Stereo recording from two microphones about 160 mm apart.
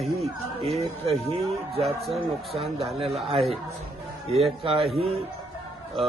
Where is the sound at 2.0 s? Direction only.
Centre (ahead or behind).